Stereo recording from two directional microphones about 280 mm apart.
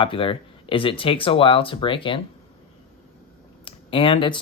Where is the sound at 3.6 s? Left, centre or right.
Centre.